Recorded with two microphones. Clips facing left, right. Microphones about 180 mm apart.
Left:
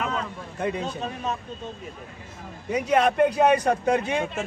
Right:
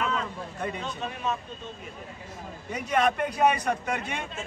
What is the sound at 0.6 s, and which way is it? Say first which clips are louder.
Speech: left 6 dB; 35° left (ahead or behind).